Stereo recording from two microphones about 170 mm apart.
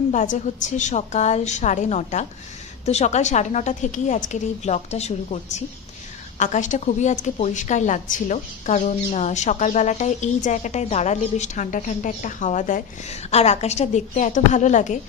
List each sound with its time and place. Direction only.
0.1 s a woman's voice: 45° left (ahead or behind)
13.3 s a woman's voice: 40° left (ahead or behind)